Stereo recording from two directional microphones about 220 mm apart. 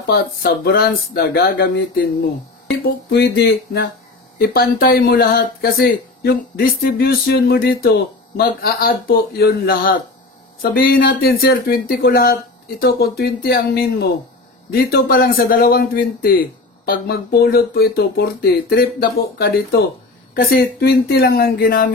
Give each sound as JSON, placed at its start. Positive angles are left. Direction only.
{"t": 0.0, "sound": "speech", "side_deg": 45}